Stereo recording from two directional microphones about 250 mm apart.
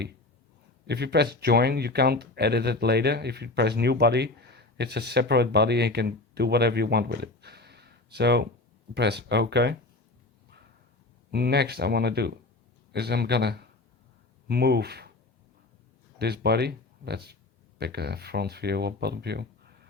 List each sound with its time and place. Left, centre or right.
0.9 s speech: right
11.3 s speech: right
16.1 s speech: right